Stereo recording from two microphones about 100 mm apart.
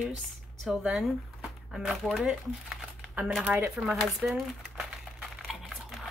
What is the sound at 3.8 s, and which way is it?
Crumpling, centre (ahead or behind).